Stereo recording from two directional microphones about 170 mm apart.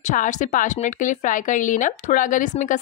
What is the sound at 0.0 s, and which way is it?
A woman's voice, 50° left (ahead or behind).